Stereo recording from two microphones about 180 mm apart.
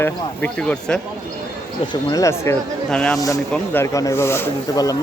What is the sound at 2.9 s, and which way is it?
A man's voice, 5° left (ahead or behind).